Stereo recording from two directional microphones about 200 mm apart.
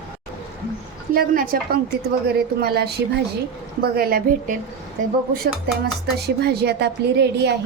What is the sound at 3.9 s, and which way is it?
Speech, 45° right (ahead or behind).